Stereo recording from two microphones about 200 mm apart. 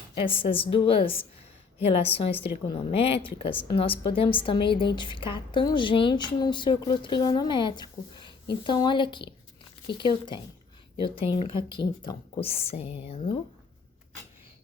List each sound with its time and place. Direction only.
0.1 s a woman's voice: 25° left (ahead or behind)